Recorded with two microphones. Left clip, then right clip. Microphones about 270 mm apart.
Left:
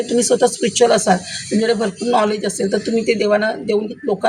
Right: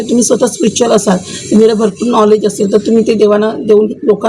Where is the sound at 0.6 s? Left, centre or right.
Left.